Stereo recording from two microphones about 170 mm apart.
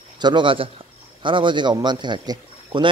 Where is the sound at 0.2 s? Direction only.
25° right (ahead or behind).